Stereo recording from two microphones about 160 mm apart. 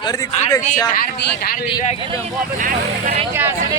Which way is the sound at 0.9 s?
65° left (ahead or behind).